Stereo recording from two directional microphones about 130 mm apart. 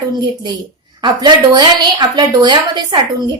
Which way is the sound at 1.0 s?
35° right (ahead or behind).